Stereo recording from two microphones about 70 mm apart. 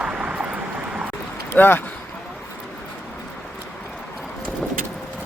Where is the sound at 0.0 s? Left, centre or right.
Centre.